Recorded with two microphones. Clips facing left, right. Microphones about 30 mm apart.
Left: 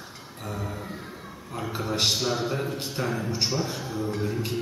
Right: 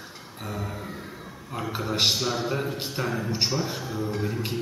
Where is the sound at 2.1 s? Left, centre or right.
Centre.